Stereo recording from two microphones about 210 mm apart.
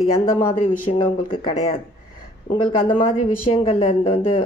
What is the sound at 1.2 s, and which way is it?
Speech, 25° left (ahead or behind).